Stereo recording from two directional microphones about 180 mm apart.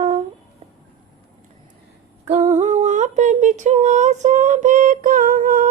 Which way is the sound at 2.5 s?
40° right (ahead or behind).